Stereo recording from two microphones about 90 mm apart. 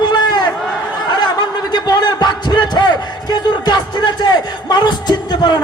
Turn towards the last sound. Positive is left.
turn(degrees=50)  # may be behind; listen again after turning